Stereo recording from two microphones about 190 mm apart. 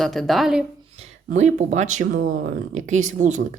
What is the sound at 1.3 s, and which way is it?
Speech, 40° right (ahead or behind).